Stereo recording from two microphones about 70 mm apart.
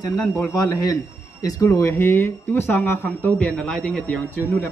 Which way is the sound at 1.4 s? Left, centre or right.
Left.